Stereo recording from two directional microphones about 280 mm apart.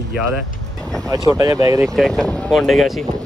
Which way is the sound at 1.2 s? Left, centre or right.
Centre.